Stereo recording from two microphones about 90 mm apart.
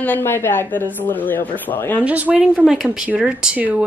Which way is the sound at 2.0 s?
15° right (ahead or behind).